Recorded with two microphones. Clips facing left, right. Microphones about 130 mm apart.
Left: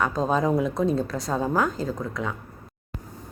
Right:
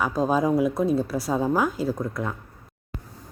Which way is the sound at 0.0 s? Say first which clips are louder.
Right 1 dB; 5° right (ahead or behind).